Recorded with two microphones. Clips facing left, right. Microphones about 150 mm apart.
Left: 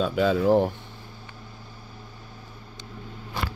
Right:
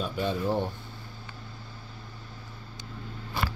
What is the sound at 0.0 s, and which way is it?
Speech, 90° left.